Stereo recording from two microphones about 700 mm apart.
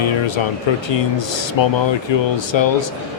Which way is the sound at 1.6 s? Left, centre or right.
Left.